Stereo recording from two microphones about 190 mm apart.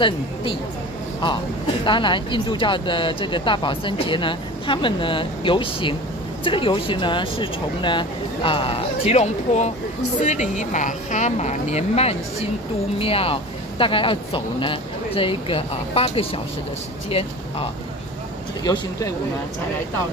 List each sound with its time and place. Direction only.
0.0 s speech: 25° left (ahead or behind)
1.9 s speech: 25° left (ahead or behind)
18.6 s speech: 20° left (ahead or behind)